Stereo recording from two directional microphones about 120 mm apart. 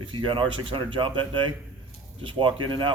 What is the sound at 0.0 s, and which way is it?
Speech, 45° right (ahead or behind).